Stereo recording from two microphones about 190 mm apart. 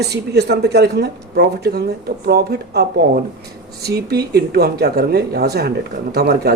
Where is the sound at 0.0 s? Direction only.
60° right (ahead or behind).